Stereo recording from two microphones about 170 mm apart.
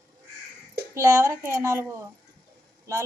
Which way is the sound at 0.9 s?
20° right (ahead or behind).